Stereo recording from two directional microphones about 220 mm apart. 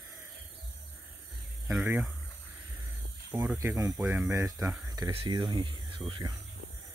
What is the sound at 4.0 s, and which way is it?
Speech, 5° right (ahead or behind).